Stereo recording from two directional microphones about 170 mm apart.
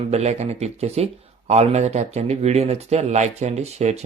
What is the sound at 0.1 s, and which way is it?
Speech, 40° right (ahead or behind).